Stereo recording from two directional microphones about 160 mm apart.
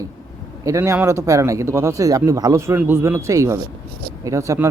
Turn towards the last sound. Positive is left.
turn(degrees=-20)  # may be behind; listen again after turning